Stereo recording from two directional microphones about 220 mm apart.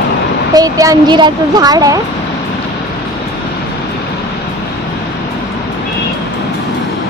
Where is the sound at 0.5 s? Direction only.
15° right (ahead or behind).